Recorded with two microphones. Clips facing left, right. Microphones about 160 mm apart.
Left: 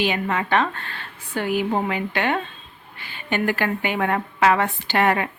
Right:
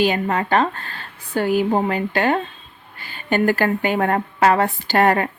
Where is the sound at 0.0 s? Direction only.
40° right (ahead or behind).